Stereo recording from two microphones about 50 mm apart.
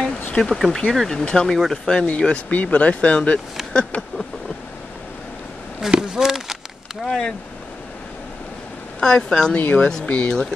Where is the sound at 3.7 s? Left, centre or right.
Left.